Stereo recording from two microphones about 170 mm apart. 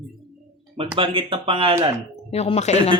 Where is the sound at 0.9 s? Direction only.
30° right (ahead or behind).